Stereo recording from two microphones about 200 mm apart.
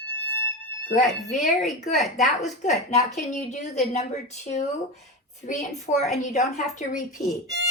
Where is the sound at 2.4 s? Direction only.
35° left (ahead or behind).